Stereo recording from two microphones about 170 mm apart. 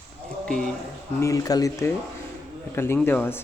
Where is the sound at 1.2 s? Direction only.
20° left (ahead or behind).